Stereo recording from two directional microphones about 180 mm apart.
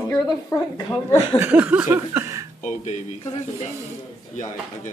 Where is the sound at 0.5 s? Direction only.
15° left (ahead or behind).